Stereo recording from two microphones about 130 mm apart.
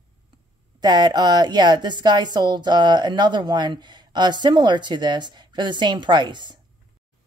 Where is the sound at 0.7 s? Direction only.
35° right (ahead or behind).